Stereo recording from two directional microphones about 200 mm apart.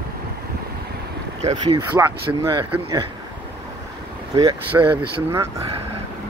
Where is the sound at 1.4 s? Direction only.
25° right (ahead or behind).